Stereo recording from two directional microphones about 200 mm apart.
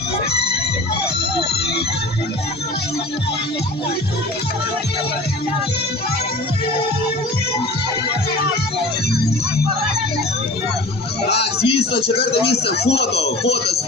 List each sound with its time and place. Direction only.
11.3 s speech: 30° left (ahead or behind)
12.9 s speech: 55° left (ahead or behind)